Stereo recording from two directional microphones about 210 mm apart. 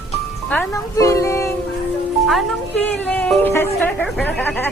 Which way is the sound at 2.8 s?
5° left (ahead or behind).